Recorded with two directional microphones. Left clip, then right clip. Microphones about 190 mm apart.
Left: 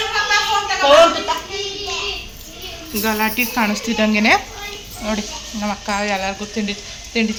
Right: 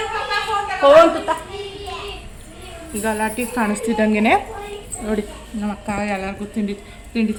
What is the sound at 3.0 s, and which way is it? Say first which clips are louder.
Speech: left 3 dB; 15° left (ahead or behind).